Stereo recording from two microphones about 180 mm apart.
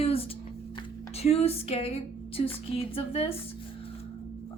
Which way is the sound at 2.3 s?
30° left (ahead or behind).